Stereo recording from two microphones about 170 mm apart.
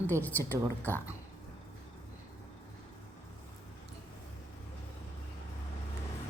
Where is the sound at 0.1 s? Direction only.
10° left (ahead or behind).